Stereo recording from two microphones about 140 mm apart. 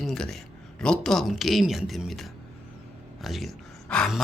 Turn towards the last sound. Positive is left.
turn(degrees=5)  # may be behind; listen again after turning